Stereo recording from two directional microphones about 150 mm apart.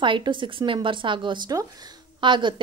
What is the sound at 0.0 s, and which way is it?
Speech, 35° right (ahead or behind).